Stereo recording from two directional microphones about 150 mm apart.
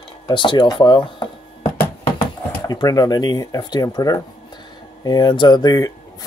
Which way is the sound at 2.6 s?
25° left (ahead or behind).